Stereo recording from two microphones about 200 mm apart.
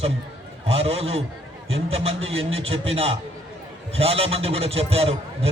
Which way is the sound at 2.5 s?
30° right (ahead or behind).